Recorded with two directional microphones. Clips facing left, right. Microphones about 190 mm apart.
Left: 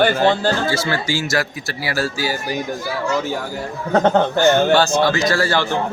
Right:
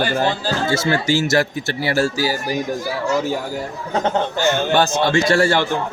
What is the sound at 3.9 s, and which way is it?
Speech, 55° left (ahead or behind).